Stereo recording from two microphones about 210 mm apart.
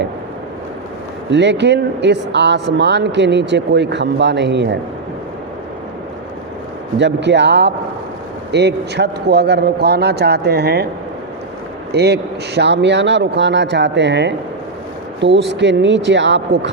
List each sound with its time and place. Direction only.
1.3 s speech: 55° right (ahead or behind)
7.0 s a man's voice: 55° right (ahead or behind)
11.9 s speech: 50° right (ahead or behind)